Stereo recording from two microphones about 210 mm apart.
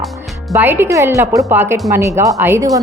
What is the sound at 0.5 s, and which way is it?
A woman's voice, 10° right (ahead or behind).